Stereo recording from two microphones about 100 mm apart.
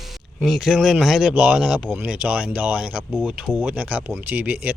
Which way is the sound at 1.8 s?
15° right (ahead or behind).